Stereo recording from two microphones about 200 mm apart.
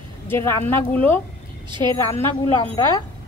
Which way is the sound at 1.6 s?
25° right (ahead or behind).